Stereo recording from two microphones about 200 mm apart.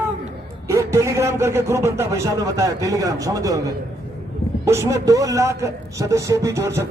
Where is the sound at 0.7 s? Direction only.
15° right (ahead or behind).